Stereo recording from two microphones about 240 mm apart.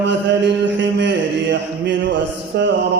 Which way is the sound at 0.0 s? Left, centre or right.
Right.